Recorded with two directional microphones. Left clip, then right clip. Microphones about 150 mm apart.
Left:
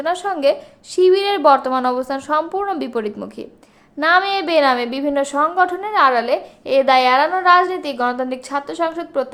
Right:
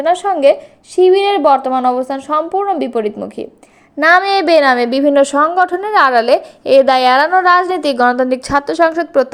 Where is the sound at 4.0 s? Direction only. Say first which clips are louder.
Right 5 dB; 40° right (ahead or behind).